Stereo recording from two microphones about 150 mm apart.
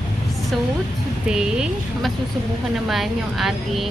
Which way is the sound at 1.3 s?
5° right (ahead or behind).